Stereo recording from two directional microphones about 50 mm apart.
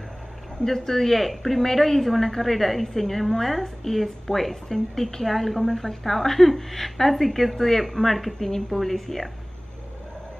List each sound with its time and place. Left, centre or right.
0.7 s a woman's voice: centre